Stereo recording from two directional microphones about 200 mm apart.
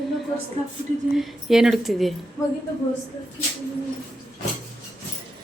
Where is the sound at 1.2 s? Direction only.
Centre (ahead or behind).